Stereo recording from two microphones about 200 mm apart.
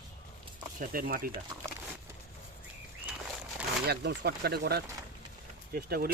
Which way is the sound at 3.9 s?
55° right (ahead or behind).